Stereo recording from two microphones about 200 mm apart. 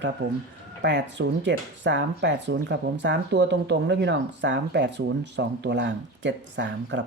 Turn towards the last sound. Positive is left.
turn(degrees=-65)  # may be behind; listen again after turning